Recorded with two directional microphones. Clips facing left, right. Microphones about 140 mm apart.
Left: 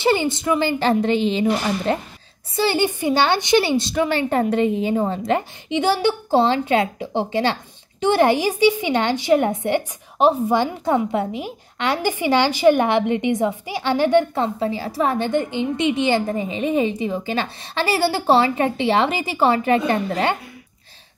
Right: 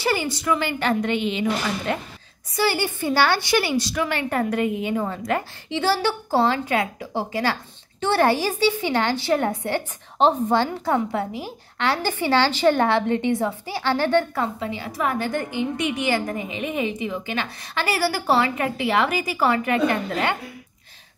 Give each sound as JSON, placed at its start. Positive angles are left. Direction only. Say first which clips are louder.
{"t": 0.0, "sound": "a woman's voice", "louder": "left 5 dB", "side_deg": 25}